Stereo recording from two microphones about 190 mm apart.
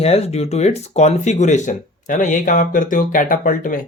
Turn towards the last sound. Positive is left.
turn(degrees=45)  # may be behind; listen again after turning